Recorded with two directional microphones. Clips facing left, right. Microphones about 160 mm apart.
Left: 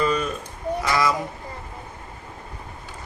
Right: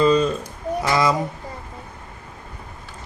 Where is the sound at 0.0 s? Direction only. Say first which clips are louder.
Right 6 dB; 25° right (ahead or behind).